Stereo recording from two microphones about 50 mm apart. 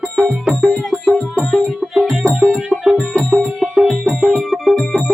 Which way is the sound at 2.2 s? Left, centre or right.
Right.